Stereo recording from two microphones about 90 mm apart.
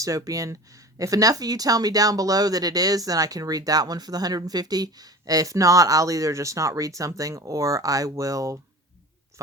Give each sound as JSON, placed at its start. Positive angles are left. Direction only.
{"t": 0.0, "sound": "speech", "side_deg": -40}